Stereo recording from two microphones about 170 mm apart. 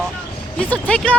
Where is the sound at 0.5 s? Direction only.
10° left (ahead or behind).